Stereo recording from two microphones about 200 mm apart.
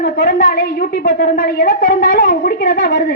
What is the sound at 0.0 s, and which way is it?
A woman's voice, 45° left (ahead or behind).